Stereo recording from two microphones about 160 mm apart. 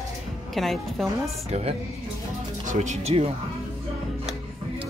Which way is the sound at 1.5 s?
40° right (ahead or behind).